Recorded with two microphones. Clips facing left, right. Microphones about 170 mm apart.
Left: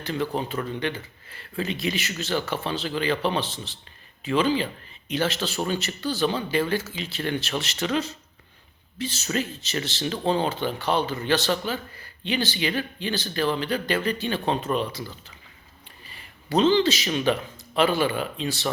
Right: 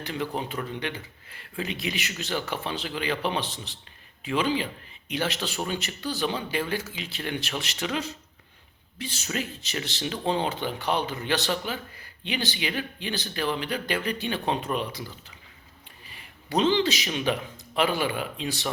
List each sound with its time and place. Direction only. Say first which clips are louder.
0.0 s speech: left 3 dB; 15° right (ahead or behind)
16.5 s speech: left 3 dB; 15° right (ahead or behind)